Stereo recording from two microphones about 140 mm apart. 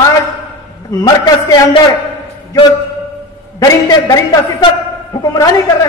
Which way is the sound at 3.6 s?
25° left (ahead or behind).